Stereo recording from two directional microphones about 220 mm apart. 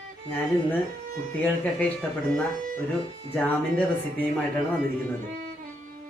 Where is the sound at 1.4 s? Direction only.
5° left (ahead or behind).